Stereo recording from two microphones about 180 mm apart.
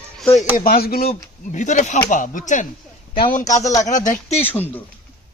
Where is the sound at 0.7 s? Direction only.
55° left (ahead or behind).